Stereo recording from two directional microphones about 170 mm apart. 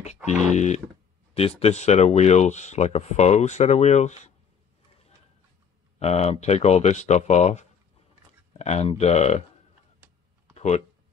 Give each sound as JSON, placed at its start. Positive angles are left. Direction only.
{"t": 0.0, "sound": "speech", "side_deg": 45}
{"t": 5.9, "sound": "speech", "side_deg": 40}
{"t": 10.5, "sound": "a sound", "side_deg": 40}